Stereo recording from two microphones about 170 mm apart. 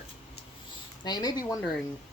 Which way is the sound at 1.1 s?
25° left (ahead or behind).